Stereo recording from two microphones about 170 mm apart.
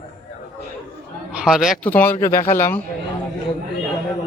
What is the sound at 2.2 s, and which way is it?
Speech, 55° left (ahead or behind).